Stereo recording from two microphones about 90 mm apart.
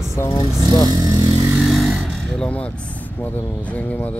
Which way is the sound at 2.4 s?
15° left (ahead or behind).